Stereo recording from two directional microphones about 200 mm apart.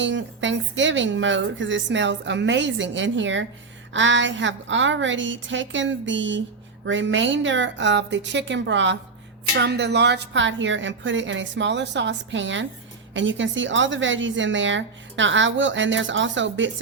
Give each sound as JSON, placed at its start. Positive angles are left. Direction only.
{"t": 0.0, "sound": "a woman's voice", "side_deg": -65}